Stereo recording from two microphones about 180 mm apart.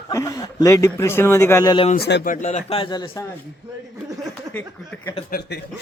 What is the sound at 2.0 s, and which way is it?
Speech, 70° left (ahead or behind).